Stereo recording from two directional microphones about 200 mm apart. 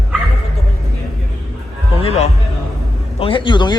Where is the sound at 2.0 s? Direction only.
30° left (ahead or behind).